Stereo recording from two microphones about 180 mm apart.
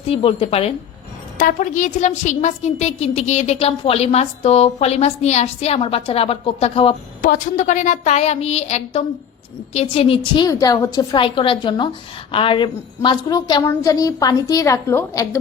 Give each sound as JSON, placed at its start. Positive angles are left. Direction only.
{"t": 0.1, "sound": "a woman's voice", "side_deg": 30}
{"t": 1.4, "sound": "a woman's voice", "side_deg": 45}
{"t": 7.2, "sound": "a woman's voice", "side_deg": 45}